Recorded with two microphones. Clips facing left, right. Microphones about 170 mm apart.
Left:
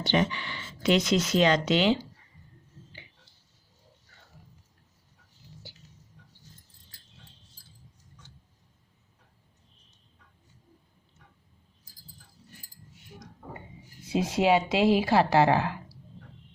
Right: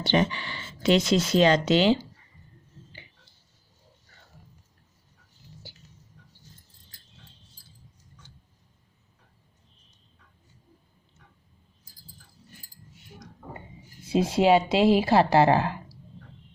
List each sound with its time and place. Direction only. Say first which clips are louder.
0.0 s speech: right 2 dB; 30° right (ahead or behind)
14.0 s speech: right 3 dB; 30° right (ahead or behind)